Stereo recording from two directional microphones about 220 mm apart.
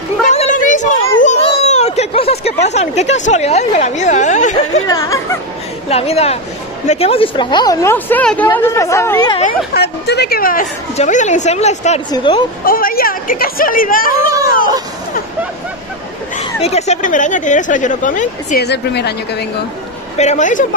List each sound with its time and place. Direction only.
0.3 s a sound: 35° left (ahead or behind)
4.8 s speech: 15° left (ahead or behind)
5.9 s speech: 30° left (ahead or behind)
9.8 s a woman's voice: 50° left (ahead or behind); by 12.4 s 20° left (ahead or behind)
12.6 s a woman's voice: 40° left (ahead or behind)
16.6 s a woman's voice: 30° left (ahead or behind)
18.7 s a woman's voice: 50° left (ahead or behind)
20.2 s a woman's voice: 35° left (ahead or behind)